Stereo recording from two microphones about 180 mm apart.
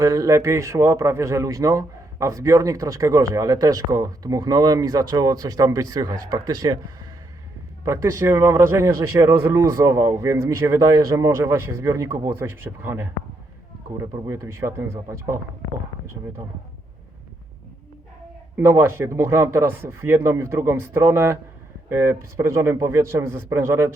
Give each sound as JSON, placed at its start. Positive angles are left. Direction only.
{"t": 0.0, "sound": "a man's voice", "side_deg": -20}
{"t": 18.5, "sound": "speech", "side_deg": -15}